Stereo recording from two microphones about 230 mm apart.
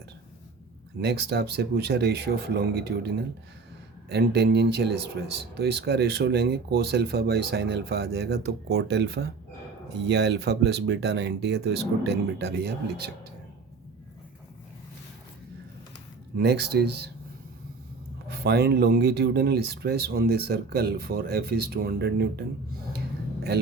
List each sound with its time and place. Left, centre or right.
1.0 s speech: right
4.1 s speech: right
16.4 s speech: right
18.3 s speech: right
23.5 s speech: right